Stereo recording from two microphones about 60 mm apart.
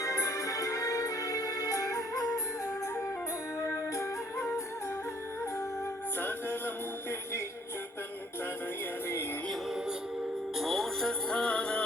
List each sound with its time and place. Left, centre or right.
0.0 s music: left
3.6 s music: left
6.1 s music: left
10.6 s music: centre
11.3 s music: centre